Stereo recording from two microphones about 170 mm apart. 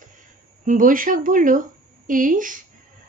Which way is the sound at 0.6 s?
50° right (ahead or behind).